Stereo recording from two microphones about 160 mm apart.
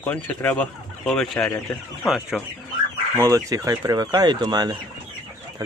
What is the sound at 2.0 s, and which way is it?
Speech, 5° right (ahead or behind).